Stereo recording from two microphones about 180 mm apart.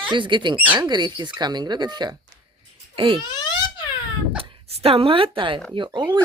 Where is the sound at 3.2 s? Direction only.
25° left (ahead or behind).